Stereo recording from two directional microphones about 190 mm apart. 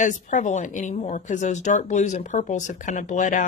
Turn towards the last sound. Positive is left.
turn(degrees=40)  # may be behind; listen again after turning